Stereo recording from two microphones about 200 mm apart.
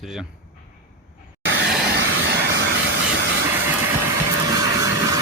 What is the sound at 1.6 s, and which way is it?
Vehicle, centre (ahead or behind).